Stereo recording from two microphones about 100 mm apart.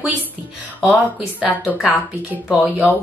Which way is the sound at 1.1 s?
15° left (ahead or behind).